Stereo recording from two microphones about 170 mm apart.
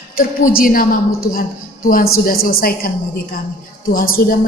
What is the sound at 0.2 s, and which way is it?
A woman's voice, 55° left (ahead or behind).